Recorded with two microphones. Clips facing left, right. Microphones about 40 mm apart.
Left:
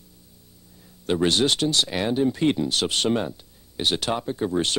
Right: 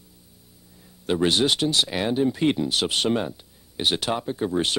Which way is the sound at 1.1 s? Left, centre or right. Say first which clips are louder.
Even; centre.